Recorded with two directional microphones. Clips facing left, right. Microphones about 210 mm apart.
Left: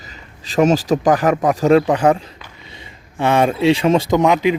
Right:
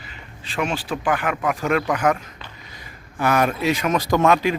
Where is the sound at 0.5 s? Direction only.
40° left (ahead or behind).